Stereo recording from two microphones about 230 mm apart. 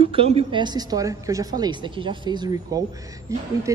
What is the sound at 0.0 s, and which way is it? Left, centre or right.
A woman's voice, right.